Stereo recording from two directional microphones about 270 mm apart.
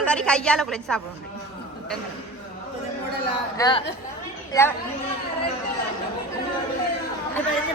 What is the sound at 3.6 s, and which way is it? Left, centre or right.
Speech, centre.